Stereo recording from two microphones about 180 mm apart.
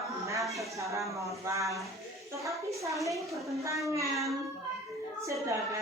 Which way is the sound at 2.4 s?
15° right (ahead or behind).